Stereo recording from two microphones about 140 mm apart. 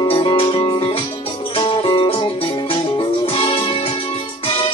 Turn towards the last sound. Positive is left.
turn(degrees=40)  # may be behind; listen again after turning